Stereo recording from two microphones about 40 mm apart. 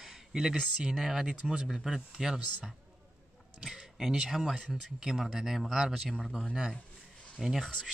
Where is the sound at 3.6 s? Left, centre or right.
Centre.